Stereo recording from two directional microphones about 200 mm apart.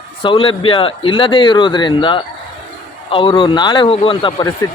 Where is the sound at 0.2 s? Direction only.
25° left (ahead or behind).